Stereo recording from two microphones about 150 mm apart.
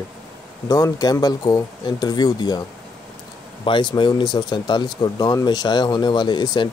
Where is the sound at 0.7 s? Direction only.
25° left (ahead or behind).